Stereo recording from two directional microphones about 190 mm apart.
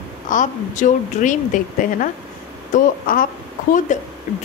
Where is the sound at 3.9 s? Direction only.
40° left (ahead or behind).